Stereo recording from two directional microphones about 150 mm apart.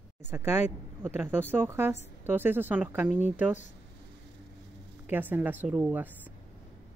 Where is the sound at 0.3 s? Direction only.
15° right (ahead or behind).